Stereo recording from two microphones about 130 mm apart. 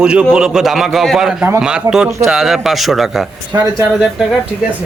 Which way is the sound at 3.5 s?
30° right (ahead or behind).